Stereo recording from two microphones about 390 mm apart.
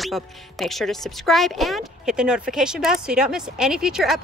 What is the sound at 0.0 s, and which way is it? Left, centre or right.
Speech, centre.